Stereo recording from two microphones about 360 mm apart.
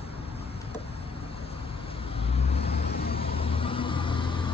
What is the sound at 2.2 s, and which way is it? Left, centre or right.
Vehicle, centre.